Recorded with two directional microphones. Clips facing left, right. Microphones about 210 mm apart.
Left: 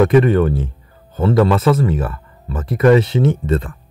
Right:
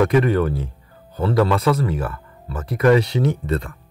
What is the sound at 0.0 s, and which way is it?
Speech, 25° left (ahead or behind).